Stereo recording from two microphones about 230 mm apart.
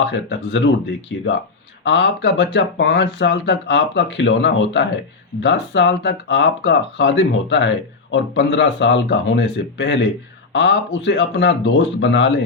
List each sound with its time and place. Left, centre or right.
0.1 s speech: left